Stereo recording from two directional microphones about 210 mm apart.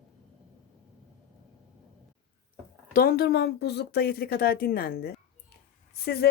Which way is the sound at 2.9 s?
50° left (ahead or behind).